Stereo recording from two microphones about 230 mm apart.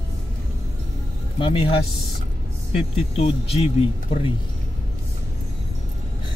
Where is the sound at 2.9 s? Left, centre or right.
Left.